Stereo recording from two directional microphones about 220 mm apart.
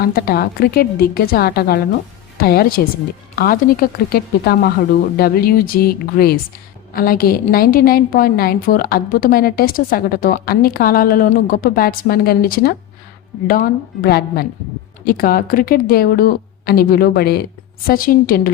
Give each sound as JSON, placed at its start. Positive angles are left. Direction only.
{"t": 0.0, "sound": "a woman's voice", "side_deg": 45}
{"t": 14.0, "sound": "a woman's voice", "side_deg": 45}